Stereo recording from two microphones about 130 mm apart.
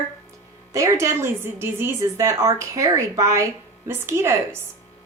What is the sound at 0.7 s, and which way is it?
A woman's voice, 25° right (ahead or behind).